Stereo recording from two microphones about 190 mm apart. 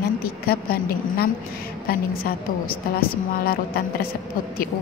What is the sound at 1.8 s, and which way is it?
A woman's voice, 50° left (ahead or behind).